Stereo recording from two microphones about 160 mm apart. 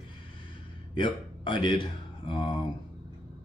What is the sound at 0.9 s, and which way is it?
Speech, 30° left (ahead or behind).